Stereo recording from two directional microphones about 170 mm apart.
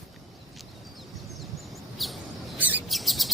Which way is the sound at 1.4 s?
Centre (ahead or behind).